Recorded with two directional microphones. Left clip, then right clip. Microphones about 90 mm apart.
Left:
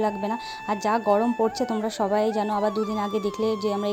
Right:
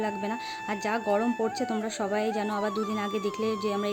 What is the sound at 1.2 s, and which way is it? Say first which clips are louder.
Speech: left 5 dB; centre (ahead or behind).